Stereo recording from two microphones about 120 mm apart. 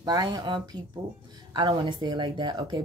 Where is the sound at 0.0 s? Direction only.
35° right (ahead or behind).